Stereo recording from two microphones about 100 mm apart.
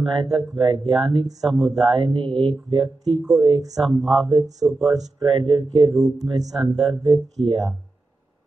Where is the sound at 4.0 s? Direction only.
5° left (ahead or behind).